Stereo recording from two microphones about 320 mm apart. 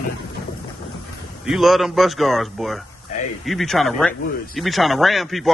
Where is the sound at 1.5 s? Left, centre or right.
Centre.